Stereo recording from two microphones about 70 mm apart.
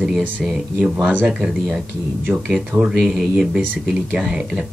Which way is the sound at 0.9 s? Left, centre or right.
Right.